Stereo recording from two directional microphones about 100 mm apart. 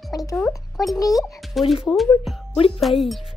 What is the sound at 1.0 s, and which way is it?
Speech, 35° left (ahead or behind).